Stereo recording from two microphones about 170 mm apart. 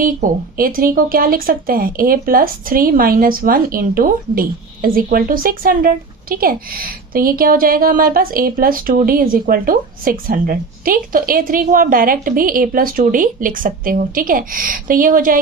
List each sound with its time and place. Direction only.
0.0 s speech: 55° right (ahead or behind)